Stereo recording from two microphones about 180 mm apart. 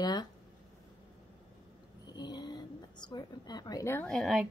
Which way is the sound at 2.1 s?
25° left (ahead or behind).